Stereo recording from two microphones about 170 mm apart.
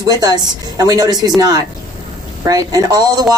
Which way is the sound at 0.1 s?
20° right (ahead or behind).